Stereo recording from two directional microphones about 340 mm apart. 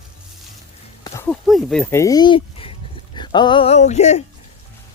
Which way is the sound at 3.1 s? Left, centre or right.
Centre.